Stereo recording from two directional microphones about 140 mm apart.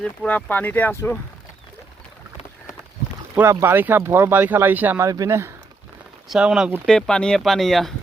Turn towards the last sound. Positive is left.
turn(degrees=0)  # may be behind; listen again after turning